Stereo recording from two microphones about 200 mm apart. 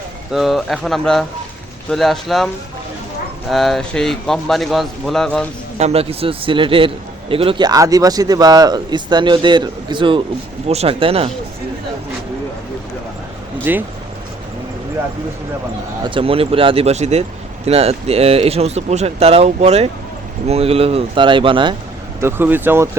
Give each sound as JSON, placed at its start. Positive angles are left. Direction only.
{"t": 0.3, "sound": "a man's voice", "side_deg": 0}
{"t": 3.5, "sound": "a man's voice", "side_deg": 0}
{"t": 5.7, "sound": "a man's voice", "side_deg": -30}
{"t": 13.7, "sound": "speech", "side_deg": -10}
{"t": 16.0, "sound": "a man's voice", "side_deg": -25}
{"t": 22.2, "sound": "speech", "side_deg": -10}